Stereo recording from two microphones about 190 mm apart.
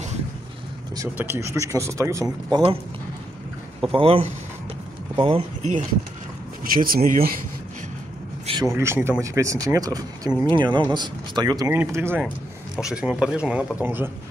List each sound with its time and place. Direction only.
0.9 s speech: 15° right (ahead or behind)
3.9 s speech: 30° right (ahead or behind)
6.6 s speech: 50° right (ahead or behind)
8.7 s speech: 15° right (ahead or behind)